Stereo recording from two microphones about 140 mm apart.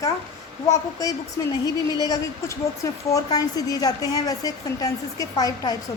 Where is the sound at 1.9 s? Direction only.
25° left (ahead or behind).